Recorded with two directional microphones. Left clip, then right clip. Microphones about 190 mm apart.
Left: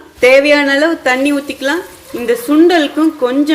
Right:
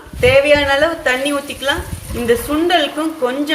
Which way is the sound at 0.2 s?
45° left (ahead or behind).